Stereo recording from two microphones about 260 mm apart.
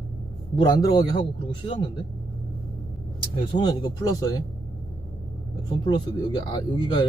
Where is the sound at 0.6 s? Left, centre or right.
Centre.